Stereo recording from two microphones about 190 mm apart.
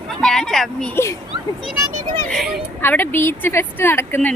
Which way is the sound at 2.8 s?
10° left (ahead or behind).